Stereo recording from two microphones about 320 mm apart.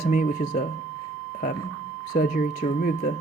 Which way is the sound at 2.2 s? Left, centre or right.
Left.